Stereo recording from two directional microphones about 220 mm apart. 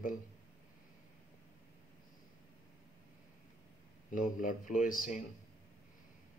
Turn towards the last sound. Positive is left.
turn(degrees=40)  # may be behind; listen again after turning